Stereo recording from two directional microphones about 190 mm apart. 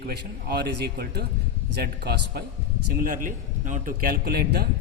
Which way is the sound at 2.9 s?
45° right (ahead or behind).